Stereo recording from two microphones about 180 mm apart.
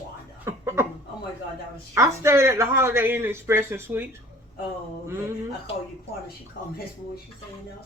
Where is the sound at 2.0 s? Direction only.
15° right (ahead or behind).